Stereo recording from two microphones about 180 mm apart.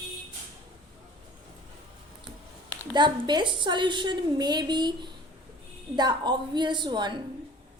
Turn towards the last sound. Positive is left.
turn(degrees=-25)  # may be behind; listen again after turning